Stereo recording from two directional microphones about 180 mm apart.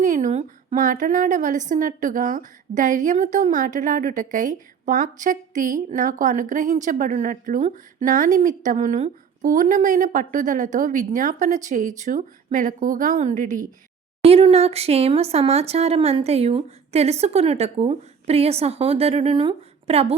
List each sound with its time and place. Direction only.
0.0 s a woman's voice: 45° right (ahead or behind)
14.2 s speech: 35° right (ahead or behind)